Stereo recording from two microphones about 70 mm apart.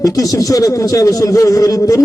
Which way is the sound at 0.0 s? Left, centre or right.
Left.